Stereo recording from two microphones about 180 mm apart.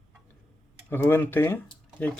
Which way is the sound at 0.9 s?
15° left (ahead or behind).